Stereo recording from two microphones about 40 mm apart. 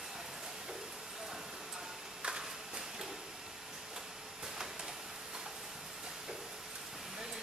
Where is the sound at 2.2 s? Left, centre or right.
Right.